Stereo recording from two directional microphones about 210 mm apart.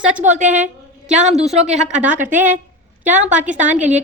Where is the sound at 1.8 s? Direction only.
5° right (ahead or behind).